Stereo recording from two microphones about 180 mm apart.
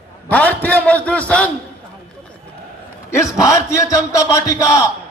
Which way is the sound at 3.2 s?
15° left (ahead or behind).